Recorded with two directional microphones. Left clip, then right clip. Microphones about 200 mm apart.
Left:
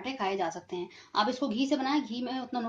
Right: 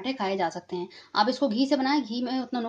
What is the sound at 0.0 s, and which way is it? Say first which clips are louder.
A woman's voice: right 4 dB; 35° right (ahead or behind).